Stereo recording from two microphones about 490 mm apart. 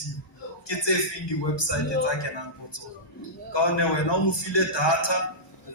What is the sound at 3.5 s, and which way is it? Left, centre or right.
A man's voice, left.